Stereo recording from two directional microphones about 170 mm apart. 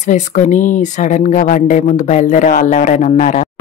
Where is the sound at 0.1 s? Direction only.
50° left (ahead or behind).